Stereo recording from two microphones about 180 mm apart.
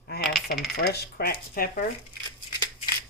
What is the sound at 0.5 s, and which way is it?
Coin, centre (ahead or behind).